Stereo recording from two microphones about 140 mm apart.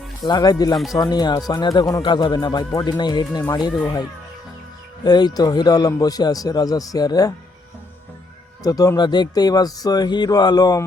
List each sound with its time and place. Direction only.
0.3 s a man's voice: 30° left (ahead or behind)
5.0 s a man's voice: 30° left (ahead or behind)
8.6 s a man's voice: 25° left (ahead or behind)